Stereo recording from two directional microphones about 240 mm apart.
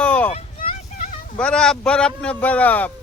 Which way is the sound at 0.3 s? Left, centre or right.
Left.